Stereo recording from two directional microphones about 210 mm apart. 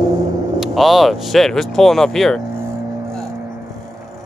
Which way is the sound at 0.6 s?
Centre (ahead or behind).